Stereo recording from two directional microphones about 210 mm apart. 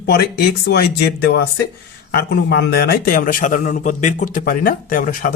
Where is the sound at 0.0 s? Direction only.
50° left (ahead or behind).